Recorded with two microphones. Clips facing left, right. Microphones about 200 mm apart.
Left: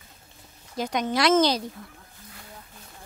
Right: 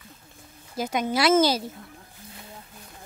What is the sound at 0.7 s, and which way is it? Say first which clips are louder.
Speech: even; 5° right (ahead or behind).